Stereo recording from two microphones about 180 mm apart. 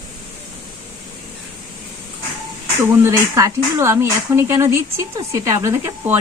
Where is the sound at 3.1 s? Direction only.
15° right (ahead or behind).